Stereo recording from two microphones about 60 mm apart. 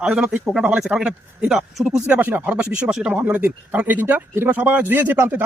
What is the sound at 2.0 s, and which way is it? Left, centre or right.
Speech, right.